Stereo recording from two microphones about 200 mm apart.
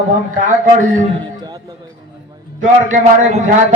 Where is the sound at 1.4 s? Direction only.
20° right (ahead or behind).